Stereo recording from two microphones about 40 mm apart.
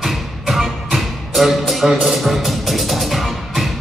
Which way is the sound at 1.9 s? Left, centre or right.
Centre.